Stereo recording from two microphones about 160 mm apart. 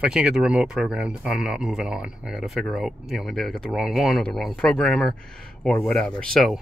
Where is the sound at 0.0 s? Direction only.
5° right (ahead or behind).